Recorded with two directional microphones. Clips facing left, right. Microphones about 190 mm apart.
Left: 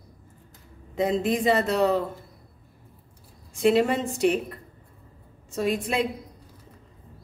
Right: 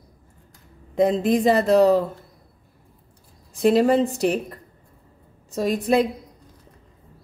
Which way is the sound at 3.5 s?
35° right (ahead or behind).